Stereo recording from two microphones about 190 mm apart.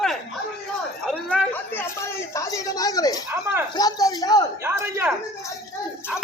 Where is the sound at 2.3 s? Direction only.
15° left (ahead or behind).